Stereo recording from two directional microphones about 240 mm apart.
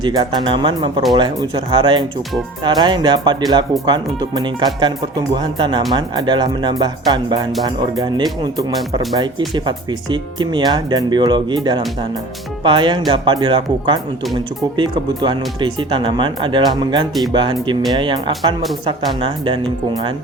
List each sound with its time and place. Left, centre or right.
0.0 s speech: centre